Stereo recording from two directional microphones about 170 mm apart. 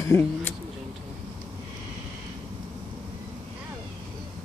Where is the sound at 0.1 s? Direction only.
15° left (ahead or behind).